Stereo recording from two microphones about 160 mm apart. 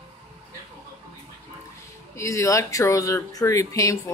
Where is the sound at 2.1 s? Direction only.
20° left (ahead or behind).